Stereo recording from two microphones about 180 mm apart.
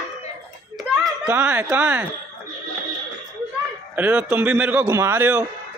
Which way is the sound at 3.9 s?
10° right (ahead or behind).